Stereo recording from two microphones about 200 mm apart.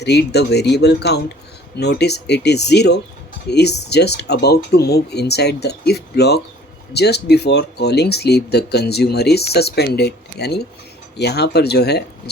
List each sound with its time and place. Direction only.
0.0 s speech: 55° left (ahead or behind)